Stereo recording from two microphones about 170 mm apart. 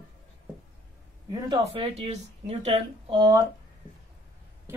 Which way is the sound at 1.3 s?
25° right (ahead or behind).